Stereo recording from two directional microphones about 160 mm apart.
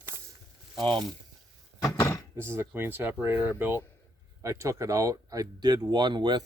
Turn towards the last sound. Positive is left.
turn(degrees=-30)  # may be behind; listen again after turning